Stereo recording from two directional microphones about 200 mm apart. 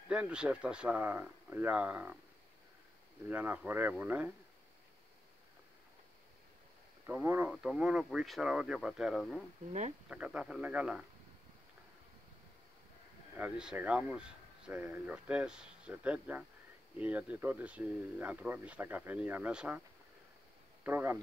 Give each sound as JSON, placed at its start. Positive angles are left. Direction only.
{"t": 0.1, "sound": "speech", "side_deg": -5}
{"t": 3.3, "sound": "speech", "side_deg": -10}
{"t": 7.1, "sound": "speech", "side_deg": -10}
{"t": 9.7, "sound": "speech", "side_deg": -30}
{"t": 10.0, "sound": "speech", "side_deg": -5}
{"t": 13.4, "sound": "speech", "side_deg": -5}
{"t": 20.8, "sound": "speech", "side_deg": -10}